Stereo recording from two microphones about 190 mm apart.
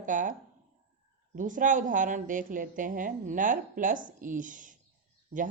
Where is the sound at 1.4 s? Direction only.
45° right (ahead or behind).